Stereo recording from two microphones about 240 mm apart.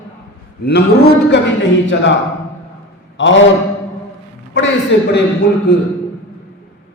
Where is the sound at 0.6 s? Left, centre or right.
Left.